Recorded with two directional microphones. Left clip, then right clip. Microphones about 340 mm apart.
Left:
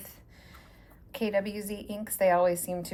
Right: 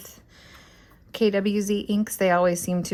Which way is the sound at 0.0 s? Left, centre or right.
Centre.